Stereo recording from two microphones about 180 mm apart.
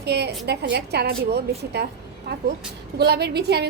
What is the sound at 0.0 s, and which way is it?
A woman's voice, 65° right (ahead or behind).